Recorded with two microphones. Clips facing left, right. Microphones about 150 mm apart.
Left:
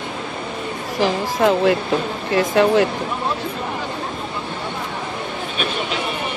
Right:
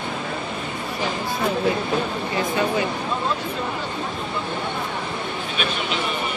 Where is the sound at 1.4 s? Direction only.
90° left.